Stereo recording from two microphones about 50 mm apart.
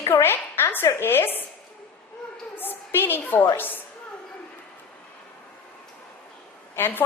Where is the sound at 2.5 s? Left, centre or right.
Left.